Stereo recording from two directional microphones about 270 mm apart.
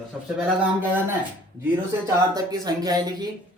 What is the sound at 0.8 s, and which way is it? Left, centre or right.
Speech, centre.